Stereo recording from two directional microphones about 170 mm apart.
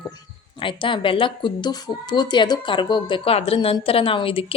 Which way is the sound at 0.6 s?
30° left (ahead or behind).